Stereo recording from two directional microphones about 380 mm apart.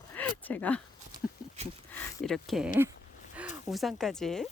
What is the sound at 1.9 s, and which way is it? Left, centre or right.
Speech, centre.